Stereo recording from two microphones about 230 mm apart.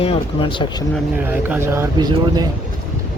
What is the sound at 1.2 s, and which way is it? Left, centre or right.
Speech, centre.